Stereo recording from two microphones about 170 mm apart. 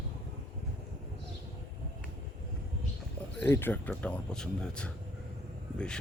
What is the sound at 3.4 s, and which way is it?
Speech, 10° left (ahead or behind).